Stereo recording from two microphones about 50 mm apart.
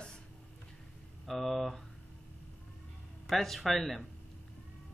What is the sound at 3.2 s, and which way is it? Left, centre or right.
Speech, centre.